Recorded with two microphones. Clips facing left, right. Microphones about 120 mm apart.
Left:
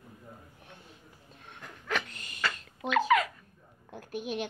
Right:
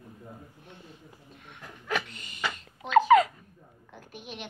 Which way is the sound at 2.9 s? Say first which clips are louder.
Right 6 dB; 35° right (ahead or behind).